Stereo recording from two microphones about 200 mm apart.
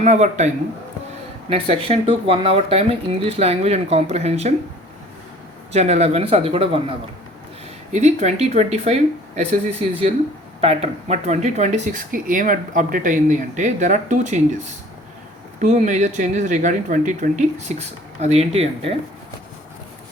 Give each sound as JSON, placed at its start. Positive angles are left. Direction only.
{"t": 0.0, "sound": "speech", "side_deg": -35}
{"t": 5.7, "sound": "speech", "side_deg": -30}
{"t": 7.9, "sound": "speech", "side_deg": -35}
{"t": 15.6, "sound": "speech", "side_deg": -35}